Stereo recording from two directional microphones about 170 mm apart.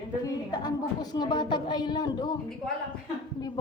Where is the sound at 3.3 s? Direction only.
25° left (ahead or behind).